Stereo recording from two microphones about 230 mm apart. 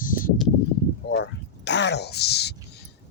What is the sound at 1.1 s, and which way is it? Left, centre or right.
Speech, left.